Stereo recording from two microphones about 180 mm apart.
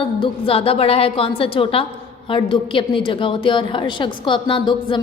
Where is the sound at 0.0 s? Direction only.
30° left (ahead or behind).